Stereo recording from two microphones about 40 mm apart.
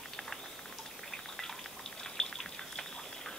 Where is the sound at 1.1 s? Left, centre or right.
Centre.